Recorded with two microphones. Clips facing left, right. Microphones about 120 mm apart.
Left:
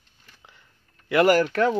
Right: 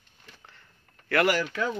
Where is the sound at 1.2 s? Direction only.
50° left (ahead or behind).